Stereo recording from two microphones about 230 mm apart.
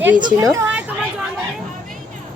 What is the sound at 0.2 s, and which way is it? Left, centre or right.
Speech, centre.